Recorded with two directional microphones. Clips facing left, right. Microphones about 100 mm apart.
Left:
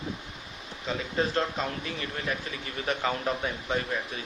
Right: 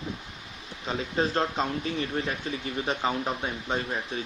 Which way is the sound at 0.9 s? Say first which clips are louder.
Right 1 dB; 35° right (ahead or behind).